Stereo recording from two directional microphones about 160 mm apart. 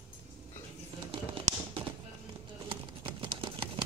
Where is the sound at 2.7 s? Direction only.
30° right (ahead or behind).